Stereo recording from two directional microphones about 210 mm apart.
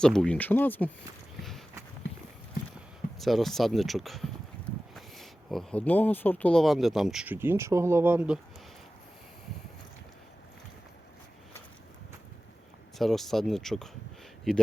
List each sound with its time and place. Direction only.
0.0 s speech: 5° left (ahead or behind)
1.4 s clip-clop: centre (ahead or behind)
3.2 s speech: centre (ahead or behind)
13.0 s speech: centre (ahead or behind)